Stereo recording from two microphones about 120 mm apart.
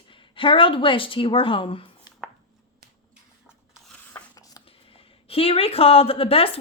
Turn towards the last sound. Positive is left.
turn(degrees=50)  # may be behind; listen again after turning